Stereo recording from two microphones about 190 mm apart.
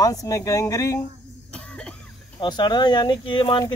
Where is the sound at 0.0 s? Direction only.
20° left (ahead or behind).